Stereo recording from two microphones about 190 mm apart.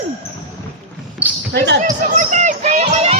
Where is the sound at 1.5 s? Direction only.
65° right (ahead or behind).